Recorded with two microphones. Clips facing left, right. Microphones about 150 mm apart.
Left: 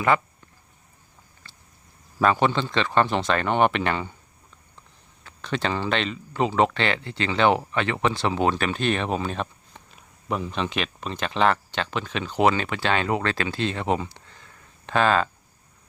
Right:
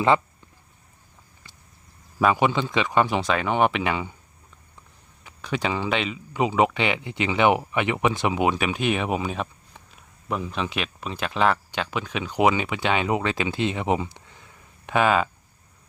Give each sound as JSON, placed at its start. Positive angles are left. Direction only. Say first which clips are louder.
{"t": 1.5, "sound": "a sound", "louder": "even", "side_deg": -15}
{"t": 2.1, "sound": "speech", "louder": "even", "side_deg": -10}
{"t": 5.2, "sound": "speech", "louder": "even", "side_deg": -10}